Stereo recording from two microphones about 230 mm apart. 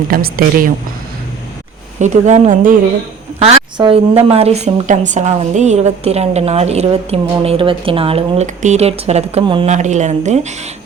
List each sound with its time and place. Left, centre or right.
0.1 s speech: right
2.0 s a woman's voice: right